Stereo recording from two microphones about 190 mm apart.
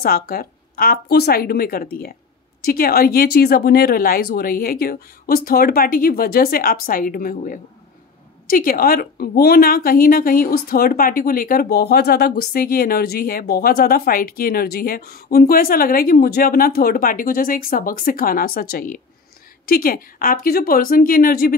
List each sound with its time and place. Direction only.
0.0 s a woman's voice: 50° left (ahead or behind)